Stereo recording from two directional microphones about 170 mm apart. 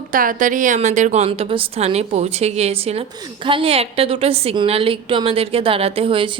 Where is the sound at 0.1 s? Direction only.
55° right (ahead or behind).